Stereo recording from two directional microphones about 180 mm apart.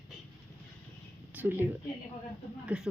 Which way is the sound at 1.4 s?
10° right (ahead or behind).